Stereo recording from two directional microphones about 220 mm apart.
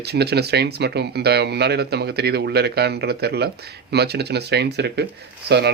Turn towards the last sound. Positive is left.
turn(degrees=-50)  # may be behind; listen again after turning